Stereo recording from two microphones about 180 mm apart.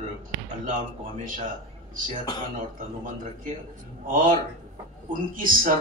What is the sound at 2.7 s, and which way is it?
A man's voice, 45° right (ahead or behind).